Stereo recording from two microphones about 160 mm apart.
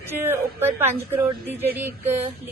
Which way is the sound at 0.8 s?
15° right (ahead or behind).